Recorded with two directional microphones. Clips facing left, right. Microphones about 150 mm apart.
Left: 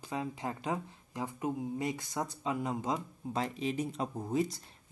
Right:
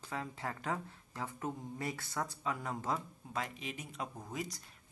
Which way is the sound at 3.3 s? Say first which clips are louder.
Left 8 dB; 30° left (ahead or behind).